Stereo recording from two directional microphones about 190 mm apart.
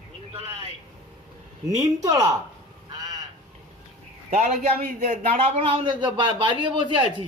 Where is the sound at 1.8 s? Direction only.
20° right (ahead or behind).